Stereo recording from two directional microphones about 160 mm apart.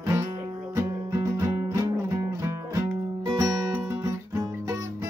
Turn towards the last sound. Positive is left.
turn(degrees=-20)  # may be behind; listen again after turning